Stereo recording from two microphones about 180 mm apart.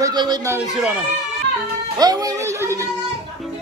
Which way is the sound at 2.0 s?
20° right (ahead or behind).